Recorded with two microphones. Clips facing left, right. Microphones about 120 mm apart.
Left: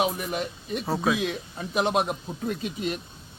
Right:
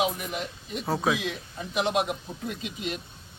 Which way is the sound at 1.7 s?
40° left (ahead or behind).